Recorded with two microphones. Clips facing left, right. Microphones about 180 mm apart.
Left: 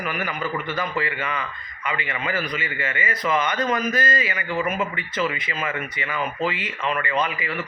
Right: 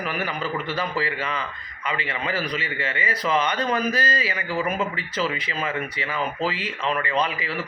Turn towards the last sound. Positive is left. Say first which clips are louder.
# even
turn(degrees=-30)  # may be behind; listen again after turning